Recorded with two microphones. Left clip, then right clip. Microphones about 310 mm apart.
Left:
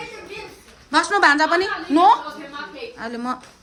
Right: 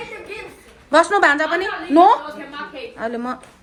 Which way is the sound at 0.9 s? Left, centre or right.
Centre.